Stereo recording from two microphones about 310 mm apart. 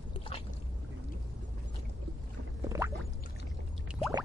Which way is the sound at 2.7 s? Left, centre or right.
Centre.